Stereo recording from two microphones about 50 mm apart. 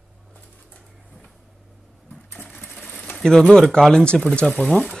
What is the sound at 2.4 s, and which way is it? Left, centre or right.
Sewing machine, left.